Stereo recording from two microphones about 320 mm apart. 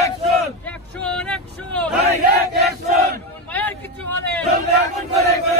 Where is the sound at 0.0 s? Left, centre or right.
Centre.